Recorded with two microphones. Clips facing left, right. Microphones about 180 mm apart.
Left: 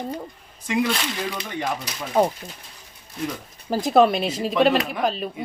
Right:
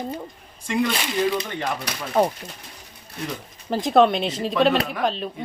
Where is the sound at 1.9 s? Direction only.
65° right (ahead or behind).